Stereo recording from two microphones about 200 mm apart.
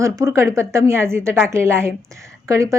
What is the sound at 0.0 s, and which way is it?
Speech, 15° right (ahead or behind).